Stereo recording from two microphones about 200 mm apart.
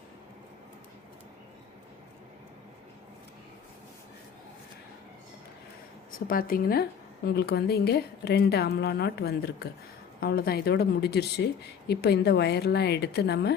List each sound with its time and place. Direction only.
6.1 s a woman's voice: 45° left (ahead or behind)